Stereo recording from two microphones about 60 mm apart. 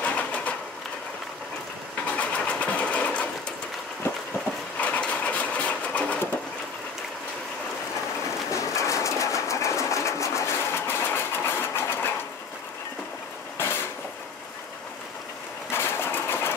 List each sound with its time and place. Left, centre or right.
0.0 s sewing machine: left
2.1 s sewing machine: left
4.7 s sewing machine: left
8.5 s a sound: left
13.6 s vehicle: left
15.7 s sewing machine: left